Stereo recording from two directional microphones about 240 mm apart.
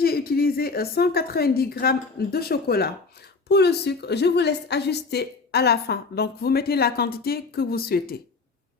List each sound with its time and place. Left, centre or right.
0.0 s a woman's voice: left